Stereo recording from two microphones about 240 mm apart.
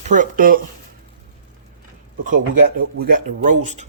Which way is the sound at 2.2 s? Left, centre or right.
Right.